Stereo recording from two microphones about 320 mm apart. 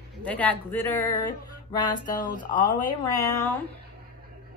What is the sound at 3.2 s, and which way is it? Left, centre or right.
Speech, centre.